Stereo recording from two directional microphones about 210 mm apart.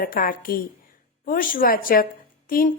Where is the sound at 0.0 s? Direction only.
40° left (ahead or behind).